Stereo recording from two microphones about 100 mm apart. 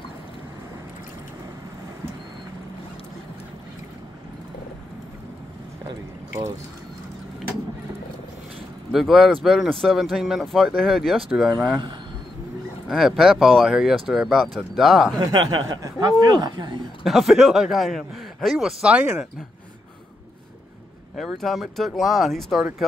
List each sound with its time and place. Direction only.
8.9 s speech: centre (ahead or behind)
12.8 s speech: 5° right (ahead or behind)
15.1 s speech: 40° right (ahead or behind)
17.0 s speech: centre (ahead or behind)
21.2 s speech: centre (ahead or behind)